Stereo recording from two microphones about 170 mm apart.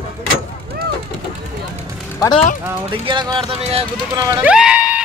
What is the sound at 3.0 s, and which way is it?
Speech, 30° right (ahead or behind).